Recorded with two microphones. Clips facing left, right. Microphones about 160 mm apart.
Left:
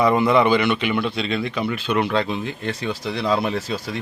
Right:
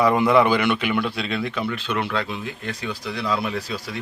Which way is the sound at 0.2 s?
5° right (ahead or behind).